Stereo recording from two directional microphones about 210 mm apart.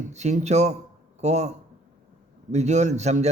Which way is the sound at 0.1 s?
35° right (ahead or behind).